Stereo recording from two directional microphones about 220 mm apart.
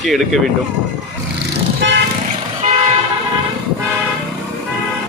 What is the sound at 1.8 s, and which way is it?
Toot, 55° right (ahead or behind).